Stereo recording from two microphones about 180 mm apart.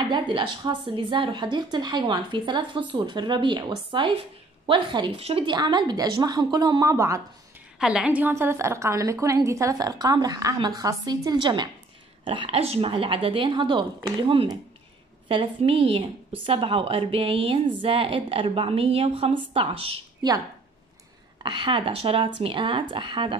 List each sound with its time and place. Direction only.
0.1 s a woman's voice: 25° right (ahead or behind)
7.8 s a woman's voice: 5° right (ahead or behind); by 23.3 s 25° right (ahead or behind)